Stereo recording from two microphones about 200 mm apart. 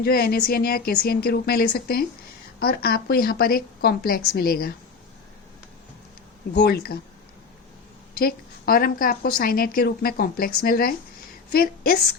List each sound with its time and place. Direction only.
0.0 s a woman's voice: 50° left (ahead or behind)
6.5 s a woman's voice: 55° left (ahead or behind)
8.1 s a woman's voice: 50° left (ahead or behind)